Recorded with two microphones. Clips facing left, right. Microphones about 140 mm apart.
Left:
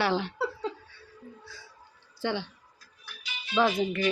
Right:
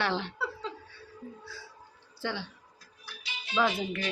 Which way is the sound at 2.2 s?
20° left (ahead or behind).